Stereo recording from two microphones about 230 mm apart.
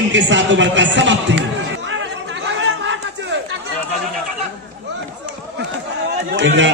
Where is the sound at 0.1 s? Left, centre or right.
Right.